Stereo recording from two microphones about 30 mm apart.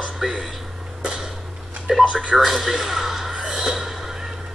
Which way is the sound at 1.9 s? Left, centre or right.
Centre.